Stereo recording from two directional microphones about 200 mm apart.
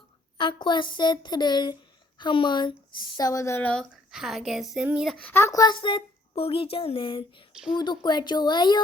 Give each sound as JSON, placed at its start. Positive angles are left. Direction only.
{"t": 0.3, "sound": "speech", "side_deg": 25}